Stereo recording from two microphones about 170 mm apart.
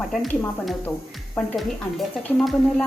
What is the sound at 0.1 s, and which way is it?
Speech, centre (ahead or behind).